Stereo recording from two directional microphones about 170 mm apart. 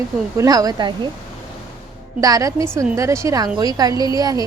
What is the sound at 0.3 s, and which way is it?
Speech, 20° right (ahead or behind).